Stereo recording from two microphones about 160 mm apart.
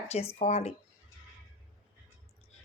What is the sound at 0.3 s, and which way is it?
Speech, 40° left (ahead or behind).